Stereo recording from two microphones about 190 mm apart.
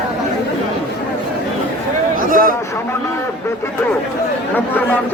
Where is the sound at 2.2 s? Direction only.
45° right (ahead or behind).